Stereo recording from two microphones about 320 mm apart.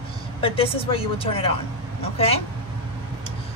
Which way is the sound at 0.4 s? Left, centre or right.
Centre.